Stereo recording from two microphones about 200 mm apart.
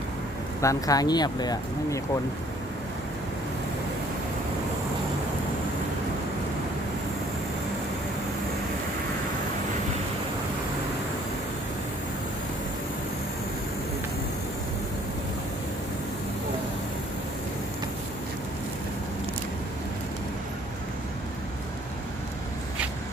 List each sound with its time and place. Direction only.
0.6 s speech: 15° left (ahead or behind)